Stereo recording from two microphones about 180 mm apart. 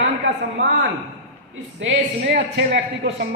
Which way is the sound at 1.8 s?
75° right (ahead or behind).